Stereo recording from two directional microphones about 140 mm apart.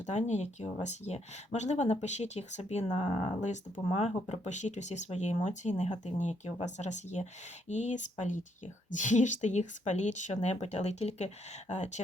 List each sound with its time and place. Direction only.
0.0 s speech: 55° left (ahead or behind)